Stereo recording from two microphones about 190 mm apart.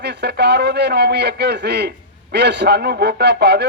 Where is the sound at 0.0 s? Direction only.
60° right (ahead or behind).